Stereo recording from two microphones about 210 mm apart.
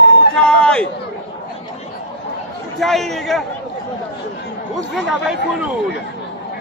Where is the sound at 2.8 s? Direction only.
Centre (ahead or behind).